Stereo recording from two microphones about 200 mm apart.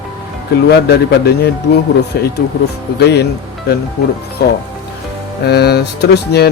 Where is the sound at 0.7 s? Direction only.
55° left (ahead or behind).